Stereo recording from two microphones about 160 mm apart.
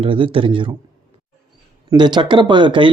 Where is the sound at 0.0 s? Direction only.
35° right (ahead or behind).